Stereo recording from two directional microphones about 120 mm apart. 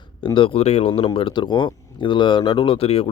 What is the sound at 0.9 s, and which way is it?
Speech, 50° left (ahead or behind).